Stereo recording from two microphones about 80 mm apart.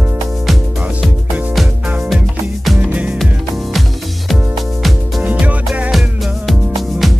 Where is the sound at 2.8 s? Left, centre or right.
Centre.